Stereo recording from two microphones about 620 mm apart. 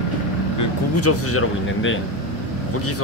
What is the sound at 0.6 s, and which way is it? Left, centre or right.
Speech, left.